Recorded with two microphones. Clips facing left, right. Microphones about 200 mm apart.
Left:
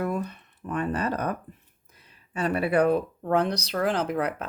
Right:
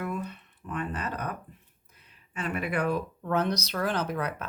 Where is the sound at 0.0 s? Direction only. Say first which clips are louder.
Left 5 dB; 40° left (ahead or behind).